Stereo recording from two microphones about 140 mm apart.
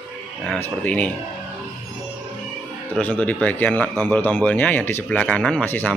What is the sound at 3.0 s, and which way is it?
Speech, 10° left (ahead or behind).